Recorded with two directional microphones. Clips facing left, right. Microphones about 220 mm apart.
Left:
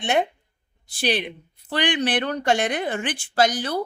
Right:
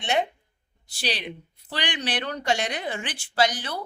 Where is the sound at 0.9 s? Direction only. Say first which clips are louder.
Left 7 dB; 55° left (ahead or behind).